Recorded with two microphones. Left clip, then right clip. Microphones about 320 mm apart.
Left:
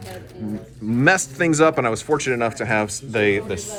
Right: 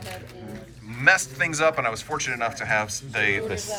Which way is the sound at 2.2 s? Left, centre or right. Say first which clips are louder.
Left 5 dB; centre.